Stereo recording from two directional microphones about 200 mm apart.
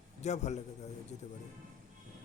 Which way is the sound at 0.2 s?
35° left (ahead or behind).